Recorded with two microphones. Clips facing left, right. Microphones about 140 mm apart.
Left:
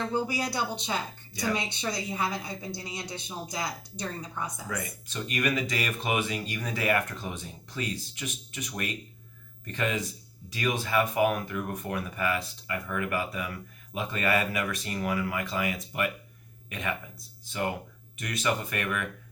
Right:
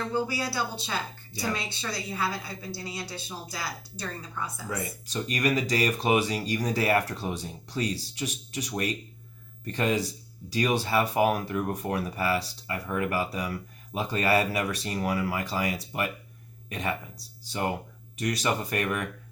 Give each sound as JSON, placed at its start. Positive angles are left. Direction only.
{"t": 0.1, "sound": "a woman's voice", "side_deg": 20}
{"t": 4.7, "sound": "speech", "side_deg": -35}